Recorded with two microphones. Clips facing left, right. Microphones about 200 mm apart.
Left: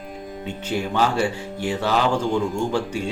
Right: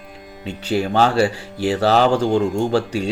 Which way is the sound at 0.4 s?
75° right (ahead or behind).